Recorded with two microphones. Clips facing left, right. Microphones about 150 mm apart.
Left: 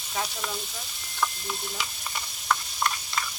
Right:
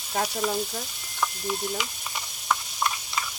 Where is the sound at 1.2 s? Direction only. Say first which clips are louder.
Right 2 dB; 10° right (ahead or behind).